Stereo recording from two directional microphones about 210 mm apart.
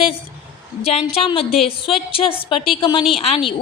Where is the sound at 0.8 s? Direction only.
30° left (ahead or behind).